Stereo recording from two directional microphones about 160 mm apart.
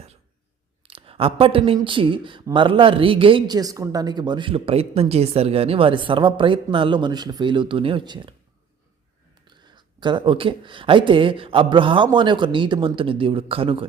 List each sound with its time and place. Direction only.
0.8 s speech: 35° right (ahead or behind)
9.5 s speech: 30° right (ahead or behind)